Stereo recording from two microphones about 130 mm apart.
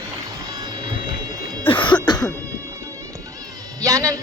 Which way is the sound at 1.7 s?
40° left (ahead or behind).